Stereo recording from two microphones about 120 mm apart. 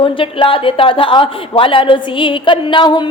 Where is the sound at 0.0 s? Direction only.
45° left (ahead or behind).